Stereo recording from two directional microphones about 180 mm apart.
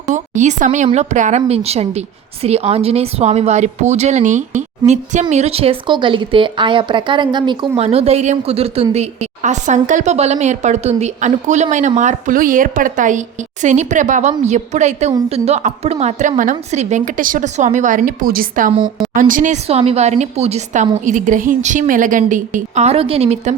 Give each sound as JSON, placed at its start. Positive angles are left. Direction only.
{"t": 0.1, "sound": "a woman's voice", "side_deg": -40}